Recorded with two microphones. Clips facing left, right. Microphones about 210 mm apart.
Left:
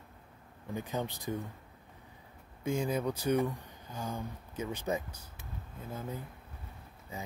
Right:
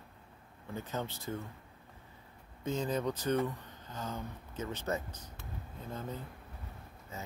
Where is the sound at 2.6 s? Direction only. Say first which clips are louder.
Left 2 dB; 10° left (ahead or behind).